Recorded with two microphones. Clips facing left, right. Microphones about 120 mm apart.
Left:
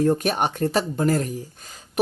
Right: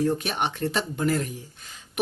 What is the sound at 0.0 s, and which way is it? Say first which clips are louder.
Speech: left 5 dB; 45° left (ahead or behind).